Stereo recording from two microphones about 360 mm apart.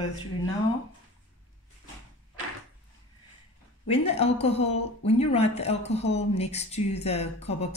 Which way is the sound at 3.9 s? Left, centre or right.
Centre.